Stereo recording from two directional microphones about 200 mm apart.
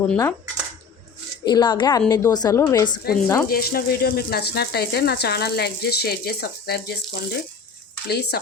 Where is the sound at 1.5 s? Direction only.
20° left (ahead or behind).